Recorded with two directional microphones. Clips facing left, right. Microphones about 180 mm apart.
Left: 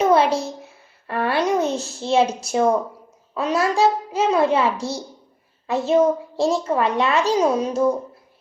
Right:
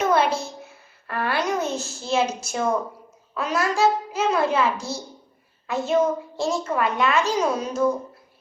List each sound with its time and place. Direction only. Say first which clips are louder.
0.0 s a sound: left 4 dB; 30° left (ahead or behind)
1.0 s babbling: left 4 dB; 30° left (ahead or behind)
1.7 s a child's voice: left 3 dB; centre (ahead or behind)
2.0 s a woman's voice: left 5 dB; 30° left (ahead or behind)